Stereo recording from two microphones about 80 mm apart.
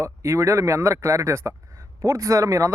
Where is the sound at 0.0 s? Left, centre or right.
Right.